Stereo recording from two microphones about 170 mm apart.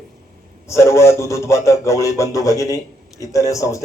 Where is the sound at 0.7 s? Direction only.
15° left (ahead or behind).